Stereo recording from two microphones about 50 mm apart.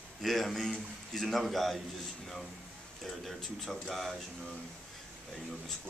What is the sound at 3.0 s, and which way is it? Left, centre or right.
A man's voice, centre.